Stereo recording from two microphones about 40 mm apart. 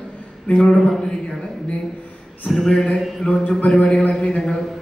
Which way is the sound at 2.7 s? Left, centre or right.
Left.